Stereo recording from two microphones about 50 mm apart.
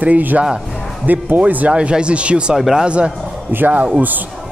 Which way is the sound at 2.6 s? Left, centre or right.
Centre.